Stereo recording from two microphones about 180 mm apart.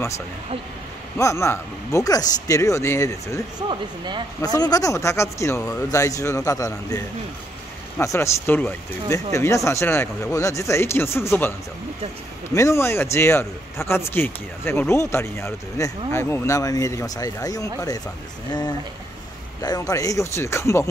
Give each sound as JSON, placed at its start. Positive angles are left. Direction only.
{"t": 1.1, "sound": "speech", "side_deg": 15}
{"t": 3.5, "sound": "speech", "side_deg": -25}
{"t": 4.4, "sound": "speech", "side_deg": 20}
{"t": 8.0, "sound": "speech", "side_deg": 15}
{"t": 12.5, "sound": "speech", "side_deg": 15}